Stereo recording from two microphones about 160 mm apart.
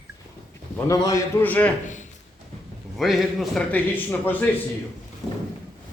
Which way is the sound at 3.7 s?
10° left (ahead or behind).